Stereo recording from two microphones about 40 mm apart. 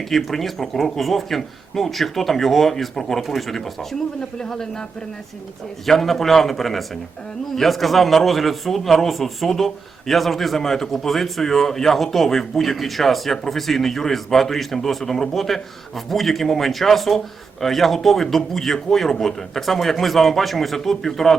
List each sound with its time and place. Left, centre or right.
0.1 s a man's voice: centre
4.2 s speech: centre
5.8 s a man's voice: centre